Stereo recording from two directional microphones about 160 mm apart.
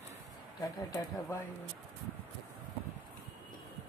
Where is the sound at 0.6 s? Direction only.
20° left (ahead or behind).